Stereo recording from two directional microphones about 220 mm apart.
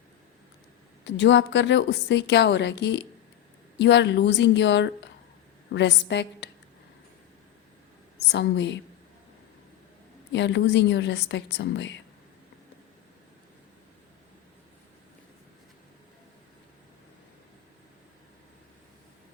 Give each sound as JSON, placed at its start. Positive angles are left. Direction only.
{"t": 1.0, "sound": "a woman's voice", "side_deg": 55}
{"t": 8.3, "sound": "a woman's voice", "side_deg": 50}
{"t": 10.3, "sound": "a woman's voice", "side_deg": 55}